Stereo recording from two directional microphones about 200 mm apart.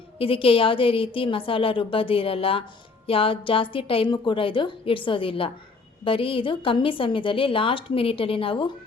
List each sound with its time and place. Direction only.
0.2 s a woman's voice: 25° left (ahead or behind)